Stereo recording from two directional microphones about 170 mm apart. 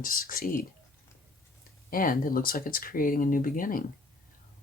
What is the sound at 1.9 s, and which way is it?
Speech, 55° left (ahead or behind).